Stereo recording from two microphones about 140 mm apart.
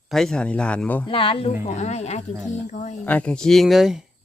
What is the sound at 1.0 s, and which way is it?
Speech, 40° left (ahead or behind).